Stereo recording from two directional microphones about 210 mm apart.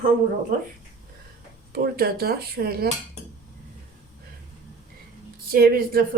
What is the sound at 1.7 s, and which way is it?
Speech, 45° right (ahead or behind).